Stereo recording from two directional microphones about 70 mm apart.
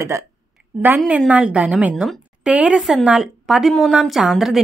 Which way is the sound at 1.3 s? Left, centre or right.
Centre.